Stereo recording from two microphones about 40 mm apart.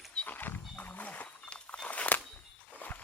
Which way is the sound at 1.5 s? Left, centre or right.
Left.